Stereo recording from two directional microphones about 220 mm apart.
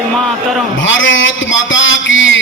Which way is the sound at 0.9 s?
60° left (ahead or behind).